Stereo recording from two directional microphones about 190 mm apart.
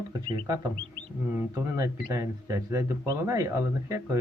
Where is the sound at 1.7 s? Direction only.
15° right (ahead or behind).